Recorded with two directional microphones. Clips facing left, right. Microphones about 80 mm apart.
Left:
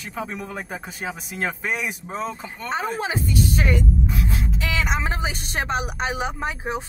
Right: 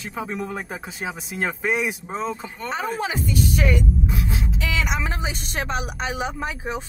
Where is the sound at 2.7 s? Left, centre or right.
Left.